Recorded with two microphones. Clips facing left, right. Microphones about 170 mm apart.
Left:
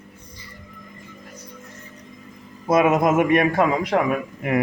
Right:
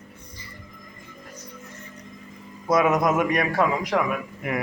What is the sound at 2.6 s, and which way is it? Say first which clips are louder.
A man's voice: left 3 dB; 25° left (ahead or behind).